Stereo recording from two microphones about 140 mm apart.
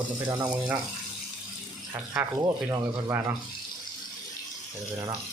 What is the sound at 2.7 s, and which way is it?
Speech, 20° right (ahead or behind).